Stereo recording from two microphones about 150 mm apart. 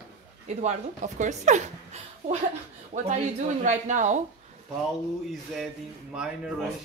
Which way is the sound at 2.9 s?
60° right (ahead or behind).